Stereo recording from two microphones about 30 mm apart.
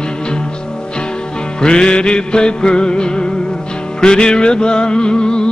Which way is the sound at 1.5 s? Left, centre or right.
Left.